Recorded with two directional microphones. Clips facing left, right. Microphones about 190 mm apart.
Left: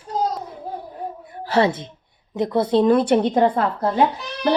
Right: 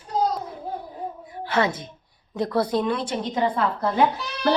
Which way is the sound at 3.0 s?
65° left (ahead or behind).